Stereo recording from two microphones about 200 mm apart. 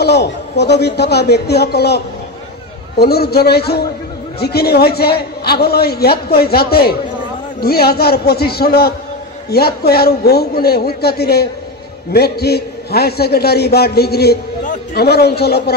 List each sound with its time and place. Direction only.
0.0 s a man's voice: 55° left (ahead or behind)
3.0 s a man's voice: 50° left (ahead or behind)